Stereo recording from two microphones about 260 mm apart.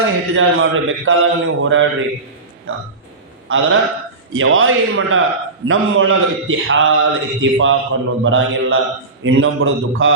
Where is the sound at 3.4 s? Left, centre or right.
Right.